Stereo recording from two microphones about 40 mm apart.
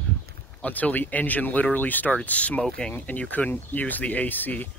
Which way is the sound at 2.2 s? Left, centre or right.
Left.